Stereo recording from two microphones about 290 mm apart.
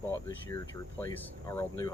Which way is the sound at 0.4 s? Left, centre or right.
Centre.